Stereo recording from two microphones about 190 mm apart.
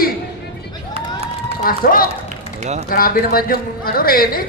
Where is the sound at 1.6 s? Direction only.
50° left (ahead or behind).